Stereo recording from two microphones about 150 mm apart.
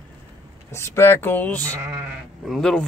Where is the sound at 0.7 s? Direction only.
20° left (ahead or behind).